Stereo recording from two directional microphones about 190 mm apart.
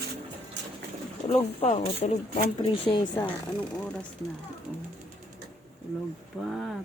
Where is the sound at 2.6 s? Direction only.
20° left (ahead or behind).